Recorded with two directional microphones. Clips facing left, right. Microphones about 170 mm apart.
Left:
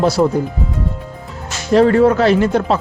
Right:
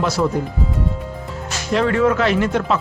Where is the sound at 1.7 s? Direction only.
35° left (ahead or behind).